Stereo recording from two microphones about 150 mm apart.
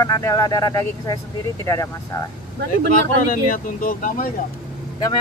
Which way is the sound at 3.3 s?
65° left (ahead or behind).